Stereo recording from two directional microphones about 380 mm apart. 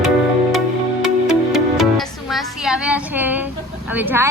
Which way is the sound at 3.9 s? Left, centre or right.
Centre.